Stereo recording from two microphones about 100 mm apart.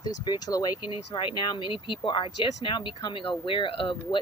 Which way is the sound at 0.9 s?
55° left (ahead or behind).